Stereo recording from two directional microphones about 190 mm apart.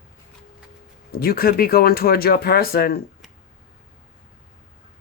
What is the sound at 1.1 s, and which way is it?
Speech, 50° left (ahead or behind).